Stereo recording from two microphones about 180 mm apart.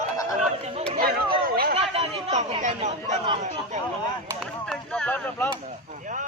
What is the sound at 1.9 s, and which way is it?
Chatter, 35° right (ahead or behind).